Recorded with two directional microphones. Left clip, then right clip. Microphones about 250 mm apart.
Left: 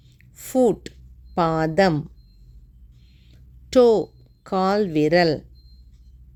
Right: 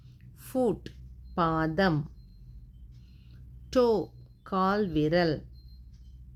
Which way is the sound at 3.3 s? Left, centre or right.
Left.